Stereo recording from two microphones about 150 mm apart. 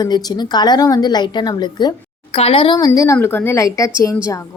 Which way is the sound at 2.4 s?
40° left (ahead or behind).